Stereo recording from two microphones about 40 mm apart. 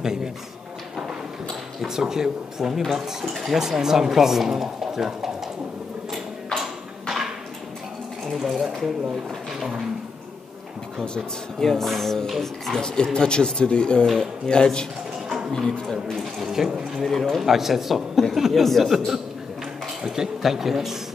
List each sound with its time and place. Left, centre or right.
0.0 s speech: centre
1.5 s speech: centre
6.6 s a sound: centre
8.4 s speech: centre
11.6 s speech: centre
12.7 s speech: centre
16.1 s speech: centre
17.0 s speech: centre
17.4 s speech: centre
18.5 s speech: centre
20.1 s speech: centre